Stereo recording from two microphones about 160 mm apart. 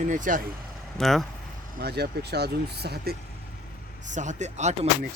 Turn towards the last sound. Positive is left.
turn(degrees=-45)  # may be behind; listen again after turning